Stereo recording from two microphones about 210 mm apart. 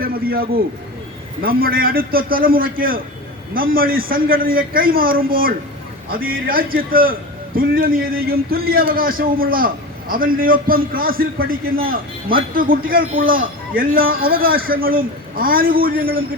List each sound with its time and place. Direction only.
0.0 s a man's voice: 45° right (ahead or behind)